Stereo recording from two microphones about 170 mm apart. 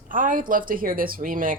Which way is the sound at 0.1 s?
55° right (ahead or behind).